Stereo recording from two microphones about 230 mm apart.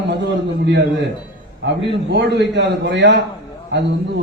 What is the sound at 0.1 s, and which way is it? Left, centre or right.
Speech, right.